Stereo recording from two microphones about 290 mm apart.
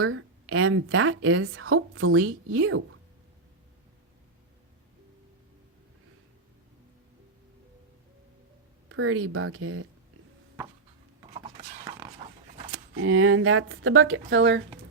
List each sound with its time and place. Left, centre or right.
0.0 s a woman's voice: right
8.9 s a woman's voice: right
11.2 s a sound: centre
12.7 s a woman's voice: right